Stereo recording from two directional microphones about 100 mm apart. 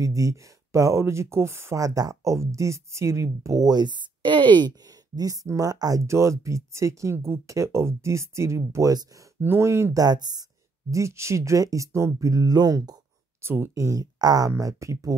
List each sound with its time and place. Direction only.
0.0 s speech: 35° right (ahead or behind)
10.0 s speech: 40° right (ahead or behind)
10.9 s speech: 30° right (ahead or behind)
13.4 s speech: 25° right (ahead or behind)